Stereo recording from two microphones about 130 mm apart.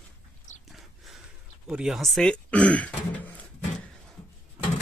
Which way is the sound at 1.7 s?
5° right (ahead or behind).